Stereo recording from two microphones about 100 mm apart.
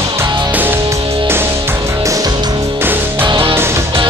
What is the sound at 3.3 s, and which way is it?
Music, 60° right (ahead or behind).